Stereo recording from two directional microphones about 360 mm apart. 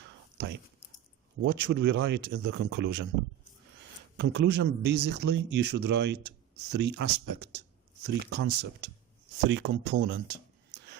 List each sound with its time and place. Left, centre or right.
1.4 s speech: right
4.2 s speech: right
4.9 s speech: right
5.3 s speech: right
5.7 s speech: right
6.0 s speech: right